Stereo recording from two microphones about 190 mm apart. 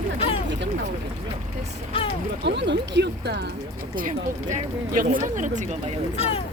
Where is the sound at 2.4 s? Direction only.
65° right (ahead or behind).